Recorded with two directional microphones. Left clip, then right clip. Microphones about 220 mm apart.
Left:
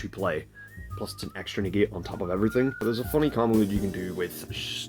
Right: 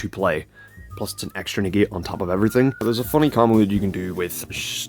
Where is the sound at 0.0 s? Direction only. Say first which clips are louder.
Right 7 dB; 40° right (ahead or behind).